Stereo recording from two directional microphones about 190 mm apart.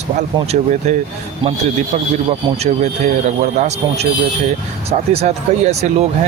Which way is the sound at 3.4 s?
35° right (ahead or behind).